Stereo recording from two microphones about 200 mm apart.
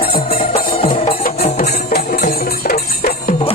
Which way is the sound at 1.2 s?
45° left (ahead or behind).